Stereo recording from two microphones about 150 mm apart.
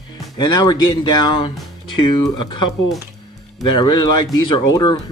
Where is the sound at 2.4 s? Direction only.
30° left (ahead or behind).